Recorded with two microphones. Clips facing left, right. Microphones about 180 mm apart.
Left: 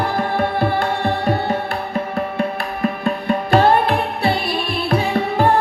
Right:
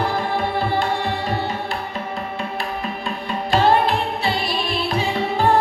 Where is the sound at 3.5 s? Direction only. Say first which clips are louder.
Left 2 dB; 55° left (ahead or behind).